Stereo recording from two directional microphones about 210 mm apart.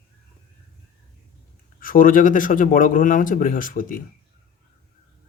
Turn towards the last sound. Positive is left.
turn(degrees=40)  # may be behind; listen again after turning